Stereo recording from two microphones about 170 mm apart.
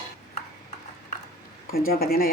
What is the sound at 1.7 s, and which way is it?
Speech, 65° left (ahead or behind).